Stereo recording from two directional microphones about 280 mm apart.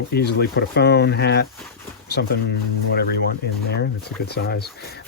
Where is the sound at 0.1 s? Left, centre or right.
Left.